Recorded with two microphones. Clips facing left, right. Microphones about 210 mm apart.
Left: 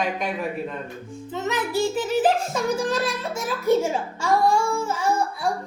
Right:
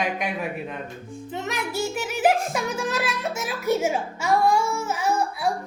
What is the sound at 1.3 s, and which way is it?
Speech, 10° right (ahead or behind).